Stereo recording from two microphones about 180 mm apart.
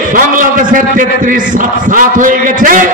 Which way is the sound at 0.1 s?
50° right (ahead or behind).